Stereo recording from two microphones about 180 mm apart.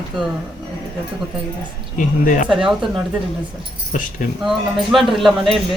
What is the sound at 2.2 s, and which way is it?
Speech, 45° left (ahead or behind).